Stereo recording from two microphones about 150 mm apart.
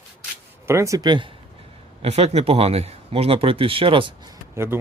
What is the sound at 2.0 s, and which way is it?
Speech, 45° right (ahead or behind).